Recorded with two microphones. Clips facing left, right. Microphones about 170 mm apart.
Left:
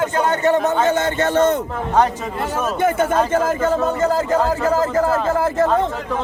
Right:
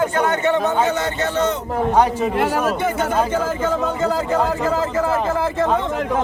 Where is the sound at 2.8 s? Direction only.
50° left (ahead or behind).